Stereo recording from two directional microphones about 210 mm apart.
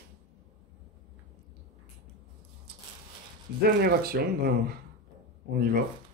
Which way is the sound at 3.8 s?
45° right (ahead or behind).